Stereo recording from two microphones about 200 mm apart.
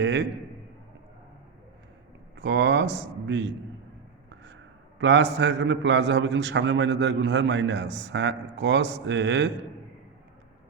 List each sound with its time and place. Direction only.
0.0 s a man's voice: 60° right (ahead or behind)
2.4 s a man's voice: 60° right (ahead or behind)
4.9 s a man's voice: 65° right (ahead or behind)